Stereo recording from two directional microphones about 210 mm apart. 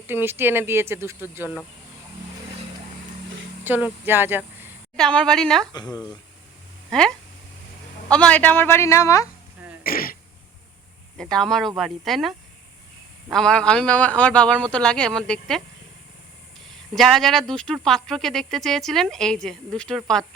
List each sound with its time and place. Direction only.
0.1 s speech: 10° right (ahead or behind)
3.6 s speech: 10° right (ahead or behind)
4.9 s speech: 5° left (ahead or behind)
5.7 s speech: 20° left (ahead or behind)
6.9 s speech: 5° left (ahead or behind)
8.1 s a man's voice: 5° left (ahead or behind)
9.8 s speech: 45° left (ahead or behind)
11.2 s speech: 5° left (ahead or behind)
13.3 s speech: 5° left (ahead or behind)
16.6 s speech: centre (ahead or behind)